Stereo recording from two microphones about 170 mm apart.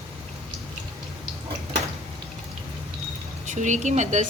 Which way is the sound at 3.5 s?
45° right (ahead or behind).